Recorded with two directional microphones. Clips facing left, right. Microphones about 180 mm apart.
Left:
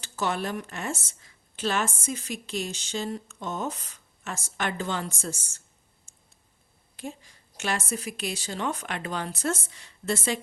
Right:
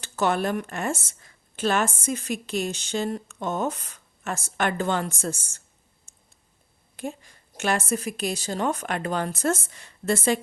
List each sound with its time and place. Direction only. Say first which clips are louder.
0.0 s speech: right 5 dB; 55° right (ahead or behind)
6.1 s clicking: right 1 dB; 55° right (ahead or behind)
6.9 s a woman's voice: right 5 dB; 55° right (ahead or behind)